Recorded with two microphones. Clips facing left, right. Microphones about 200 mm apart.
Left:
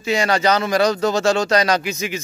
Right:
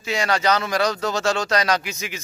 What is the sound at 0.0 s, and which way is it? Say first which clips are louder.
Speech: left 4 dB; centre (ahead or behind).